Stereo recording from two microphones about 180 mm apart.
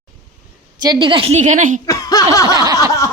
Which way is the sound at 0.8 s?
25° right (ahead or behind).